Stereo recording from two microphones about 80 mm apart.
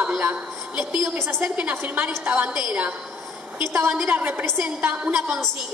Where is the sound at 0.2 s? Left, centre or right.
Right.